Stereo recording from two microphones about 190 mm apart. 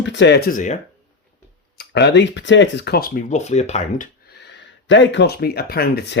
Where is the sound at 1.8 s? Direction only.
65° left (ahead or behind); by 4.1 s 40° left (ahead or behind).